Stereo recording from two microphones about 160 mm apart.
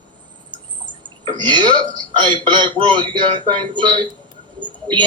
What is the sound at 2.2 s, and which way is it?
A woman's voice, 30° right (ahead or behind).